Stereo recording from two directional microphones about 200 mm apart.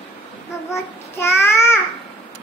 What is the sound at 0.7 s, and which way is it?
Child singing, 15° left (ahead or behind).